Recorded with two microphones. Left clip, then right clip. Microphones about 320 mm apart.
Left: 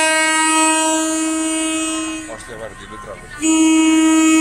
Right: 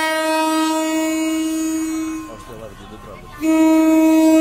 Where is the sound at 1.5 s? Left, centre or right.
Centre.